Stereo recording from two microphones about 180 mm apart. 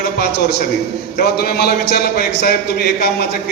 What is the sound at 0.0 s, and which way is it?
A man's voice, 65° left (ahead or behind).